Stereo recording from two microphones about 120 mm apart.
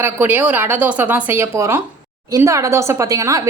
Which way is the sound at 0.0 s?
15° right (ahead or behind).